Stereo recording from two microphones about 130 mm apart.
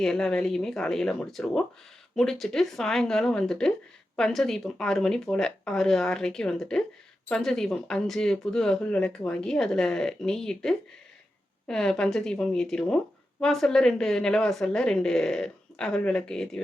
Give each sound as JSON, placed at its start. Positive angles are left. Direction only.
{"t": 0.0, "sound": "speech", "side_deg": 5}